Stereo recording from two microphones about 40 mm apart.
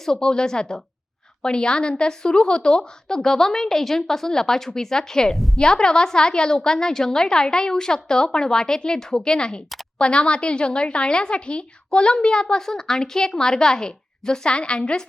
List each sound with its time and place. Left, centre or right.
0.0 s a woman's voice: centre